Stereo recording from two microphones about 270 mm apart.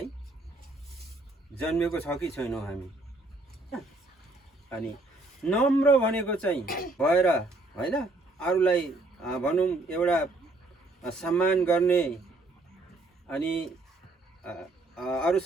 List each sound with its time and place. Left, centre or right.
1.6 s a man's voice: centre
5.4 s a man's voice: centre
6.7 s speech: left
6.9 s a man's voice: centre
13.2 s a man's voice: centre